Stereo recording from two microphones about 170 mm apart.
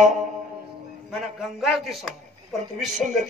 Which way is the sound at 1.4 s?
Centre (ahead or behind).